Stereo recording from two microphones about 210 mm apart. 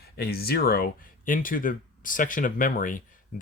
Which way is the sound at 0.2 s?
50° left (ahead or behind).